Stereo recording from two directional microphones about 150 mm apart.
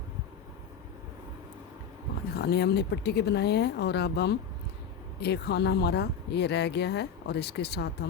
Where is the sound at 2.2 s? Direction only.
90° left.